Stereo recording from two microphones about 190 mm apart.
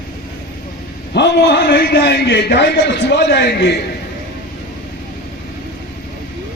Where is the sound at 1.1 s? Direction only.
65° left (ahead or behind).